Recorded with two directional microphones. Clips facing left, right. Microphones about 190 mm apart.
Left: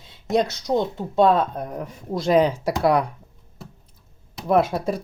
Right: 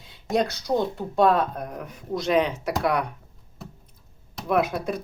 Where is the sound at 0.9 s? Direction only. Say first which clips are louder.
Left 3 dB; 25° left (ahead or behind).